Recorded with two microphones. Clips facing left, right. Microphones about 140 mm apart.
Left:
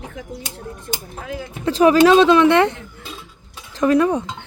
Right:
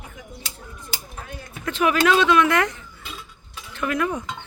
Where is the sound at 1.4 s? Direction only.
30° left (ahead or behind).